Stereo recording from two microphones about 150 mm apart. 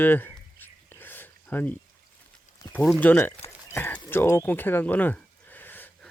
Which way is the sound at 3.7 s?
10° left (ahead or behind).